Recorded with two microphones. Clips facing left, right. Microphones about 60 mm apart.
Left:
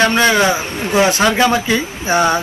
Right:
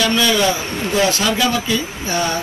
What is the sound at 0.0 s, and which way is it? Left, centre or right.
Speech, left.